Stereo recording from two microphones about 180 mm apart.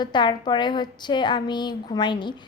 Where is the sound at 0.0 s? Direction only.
25° left (ahead or behind).